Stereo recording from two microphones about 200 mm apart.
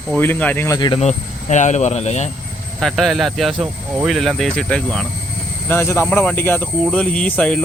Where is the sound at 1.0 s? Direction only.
35° left (ahead or behind).